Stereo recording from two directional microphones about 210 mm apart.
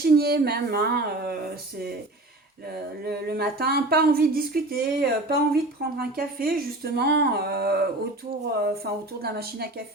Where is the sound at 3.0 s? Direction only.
50° right (ahead or behind).